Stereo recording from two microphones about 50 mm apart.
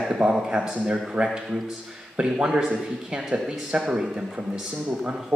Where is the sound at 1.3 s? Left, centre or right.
Centre.